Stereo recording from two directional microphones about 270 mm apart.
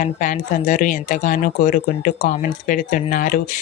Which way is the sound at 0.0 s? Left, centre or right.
Left.